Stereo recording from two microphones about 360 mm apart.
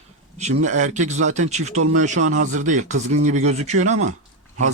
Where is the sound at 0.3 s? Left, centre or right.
Centre.